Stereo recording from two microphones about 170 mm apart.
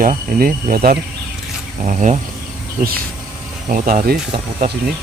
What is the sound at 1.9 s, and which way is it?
Speech, 45° right (ahead or behind).